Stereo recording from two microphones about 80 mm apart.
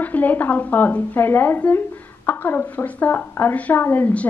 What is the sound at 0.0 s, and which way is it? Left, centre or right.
A woman's voice, left.